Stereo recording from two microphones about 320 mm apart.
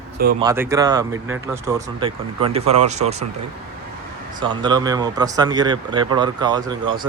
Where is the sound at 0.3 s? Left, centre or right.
Centre.